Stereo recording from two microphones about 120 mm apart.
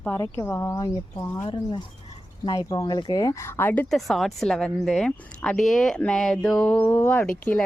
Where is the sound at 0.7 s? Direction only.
30° left (ahead or behind); by 3.9 s 15° left (ahead or behind).